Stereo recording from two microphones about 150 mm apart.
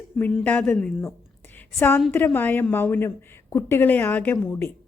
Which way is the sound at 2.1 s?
10° left (ahead or behind).